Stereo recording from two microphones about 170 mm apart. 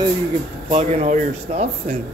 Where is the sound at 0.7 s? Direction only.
40° right (ahead or behind).